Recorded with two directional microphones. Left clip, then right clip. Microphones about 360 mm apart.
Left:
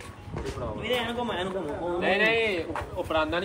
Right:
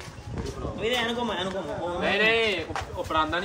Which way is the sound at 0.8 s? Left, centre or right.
Centre.